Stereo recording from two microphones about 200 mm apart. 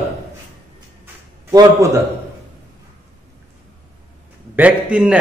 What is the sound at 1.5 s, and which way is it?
Speech, 15° right (ahead or behind).